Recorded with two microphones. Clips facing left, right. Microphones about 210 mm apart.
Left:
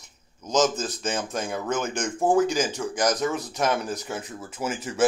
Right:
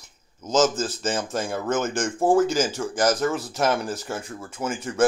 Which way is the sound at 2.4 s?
15° left (ahead or behind).